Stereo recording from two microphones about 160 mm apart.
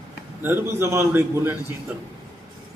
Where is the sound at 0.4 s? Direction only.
15° right (ahead or behind).